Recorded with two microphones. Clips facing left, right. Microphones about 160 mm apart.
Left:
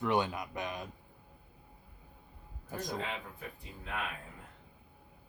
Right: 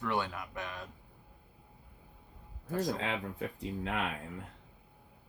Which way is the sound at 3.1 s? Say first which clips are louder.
Right 6 dB; 90° right.